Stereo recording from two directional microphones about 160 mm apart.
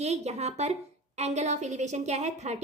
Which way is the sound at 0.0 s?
45° right (ahead or behind).